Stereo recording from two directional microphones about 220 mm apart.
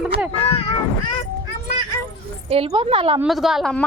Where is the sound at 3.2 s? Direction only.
Centre (ahead or behind).